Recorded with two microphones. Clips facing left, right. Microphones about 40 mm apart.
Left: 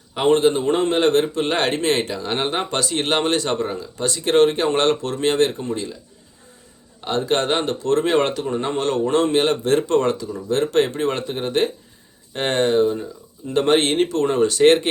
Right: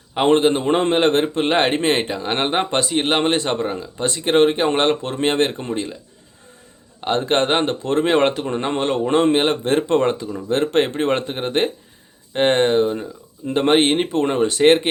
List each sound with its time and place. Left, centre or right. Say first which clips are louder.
0.1 s a man's voice: right 1 dB; right
7.0 s speech: right 2 dB; right
8.8 s speech: right 2 dB; right